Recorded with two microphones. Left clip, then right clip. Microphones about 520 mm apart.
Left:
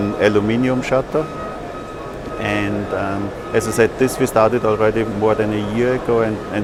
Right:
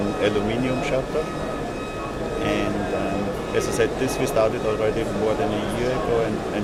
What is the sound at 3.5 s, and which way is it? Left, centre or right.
Speech, left.